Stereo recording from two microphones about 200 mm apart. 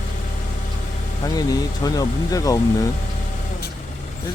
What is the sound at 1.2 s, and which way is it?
Speech, 20° left (ahead or behind).